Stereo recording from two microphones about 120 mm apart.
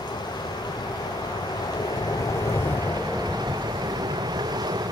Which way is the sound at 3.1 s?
35° right (ahead or behind).